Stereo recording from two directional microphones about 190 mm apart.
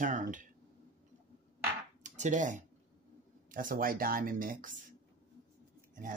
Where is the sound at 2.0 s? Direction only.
40° right (ahead or behind).